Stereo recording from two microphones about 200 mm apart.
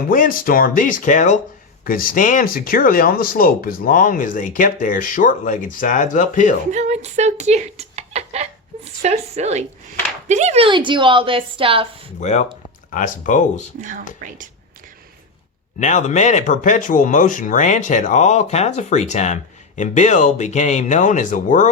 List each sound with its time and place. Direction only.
0.1 s speech: 45° left (ahead or behind)
6.7 s speech: 35° right (ahead or behind)
12.2 s speech: 35° left (ahead or behind)
15.8 s speech: 35° left (ahead or behind)